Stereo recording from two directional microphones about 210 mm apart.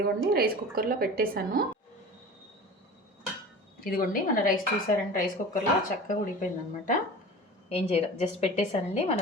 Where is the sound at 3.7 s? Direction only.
45° left (ahead or behind).